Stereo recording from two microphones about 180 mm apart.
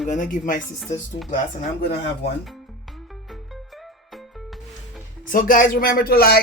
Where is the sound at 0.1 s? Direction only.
45° left (ahead or behind).